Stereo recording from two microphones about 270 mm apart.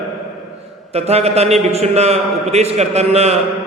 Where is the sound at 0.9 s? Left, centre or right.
Right.